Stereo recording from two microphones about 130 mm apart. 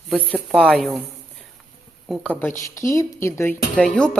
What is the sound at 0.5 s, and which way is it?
Speech, 5° left (ahead or behind).